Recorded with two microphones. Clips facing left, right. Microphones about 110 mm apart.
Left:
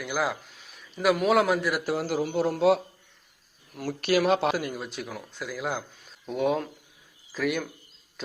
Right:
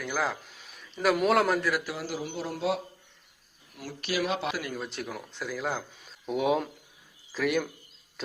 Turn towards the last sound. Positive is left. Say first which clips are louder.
# right 1 dB
turn(degrees=0)  # may be behind; listen again after turning